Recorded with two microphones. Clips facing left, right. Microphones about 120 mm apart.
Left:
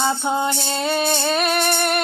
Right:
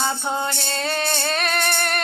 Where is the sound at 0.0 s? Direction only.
10° left (ahead or behind).